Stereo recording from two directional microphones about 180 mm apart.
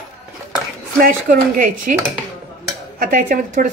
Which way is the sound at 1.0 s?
50° right (ahead or behind).